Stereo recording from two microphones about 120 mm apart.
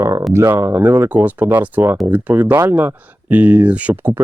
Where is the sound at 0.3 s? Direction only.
20° right (ahead or behind).